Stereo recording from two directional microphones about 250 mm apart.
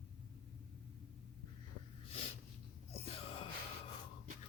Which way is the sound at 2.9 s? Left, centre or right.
Left.